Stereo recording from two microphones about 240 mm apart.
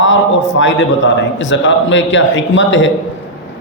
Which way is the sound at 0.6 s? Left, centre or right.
Left.